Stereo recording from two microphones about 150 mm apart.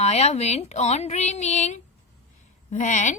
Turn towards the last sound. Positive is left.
turn(degrees=55)  # may be behind; listen again after turning